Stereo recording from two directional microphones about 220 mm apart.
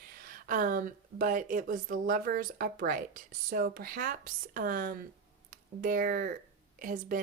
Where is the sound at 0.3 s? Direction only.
40° right (ahead or behind).